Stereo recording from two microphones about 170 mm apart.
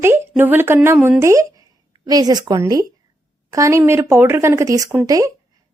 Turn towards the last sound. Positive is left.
turn(degrees=-20)  # may be behind; listen again after turning